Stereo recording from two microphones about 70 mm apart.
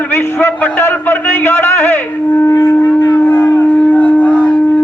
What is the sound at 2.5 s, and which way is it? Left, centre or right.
Shofar, left.